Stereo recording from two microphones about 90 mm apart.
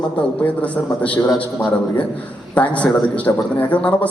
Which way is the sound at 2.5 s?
15° left (ahead or behind).